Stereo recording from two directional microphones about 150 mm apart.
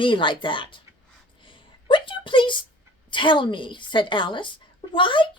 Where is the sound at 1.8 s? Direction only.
35° left (ahead or behind).